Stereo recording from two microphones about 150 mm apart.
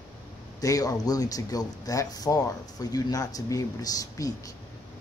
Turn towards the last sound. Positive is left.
turn(degrees=25)  # may be behind; listen again after turning